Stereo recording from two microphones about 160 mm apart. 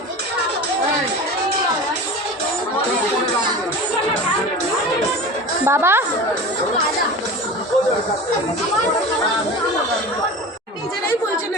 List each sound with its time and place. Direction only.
5.6 s a woman's voice: 15° right (ahead or behind)